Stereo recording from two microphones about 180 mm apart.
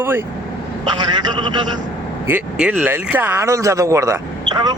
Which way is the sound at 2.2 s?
10° right (ahead or behind).